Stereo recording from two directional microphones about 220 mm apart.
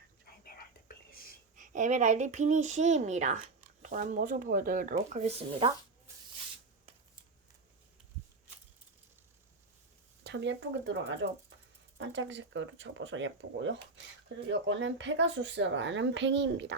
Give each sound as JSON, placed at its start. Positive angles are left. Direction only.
{"t": 0.9, "sound": "whispering", "side_deg": 40}
{"t": 1.5, "sound": "speech", "side_deg": -35}
{"t": 10.2, "sound": "speech", "side_deg": -55}